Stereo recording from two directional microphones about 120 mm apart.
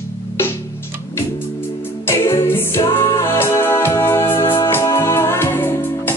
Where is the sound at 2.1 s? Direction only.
20° left (ahead or behind).